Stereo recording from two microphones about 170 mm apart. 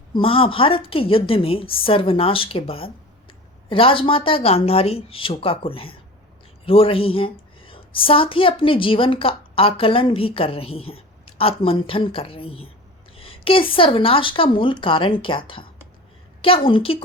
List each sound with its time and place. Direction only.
0.1 s a woman's voice: 30° left (ahead or behind)
16.4 s a woman's voice: 30° left (ahead or behind)